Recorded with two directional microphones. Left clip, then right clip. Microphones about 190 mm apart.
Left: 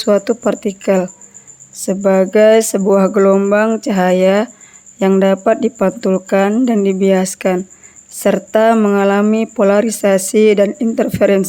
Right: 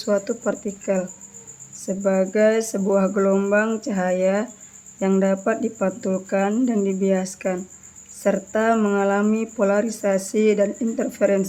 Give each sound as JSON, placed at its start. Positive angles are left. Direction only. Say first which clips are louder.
{"t": 0.0, "sound": "speech", "louder": "left 9 dB", "side_deg": 45}